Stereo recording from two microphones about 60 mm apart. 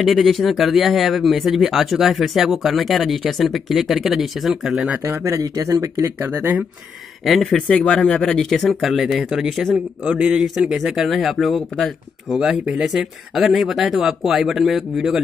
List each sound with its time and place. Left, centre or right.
0.0 s speech: centre
5.0 s speech: right
7.2 s speech: centre
10.3 s speech: centre
12.4 s speech: centre